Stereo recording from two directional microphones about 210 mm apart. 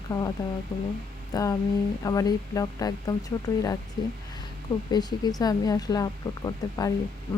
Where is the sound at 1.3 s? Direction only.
15° left (ahead or behind).